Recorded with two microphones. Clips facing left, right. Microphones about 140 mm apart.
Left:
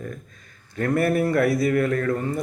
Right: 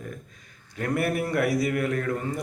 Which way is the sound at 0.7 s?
15° right (ahead or behind).